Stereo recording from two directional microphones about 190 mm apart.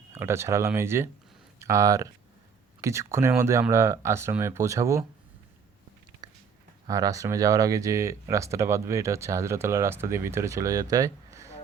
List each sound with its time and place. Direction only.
0.1 s speech: 15° right (ahead or behind)
6.2 s a sound: 20° right (ahead or behind)
6.8 s speech: 20° right (ahead or behind)